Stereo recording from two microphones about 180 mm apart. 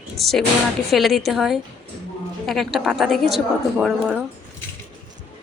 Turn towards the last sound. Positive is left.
turn(degrees=-5)  # may be behind; listen again after turning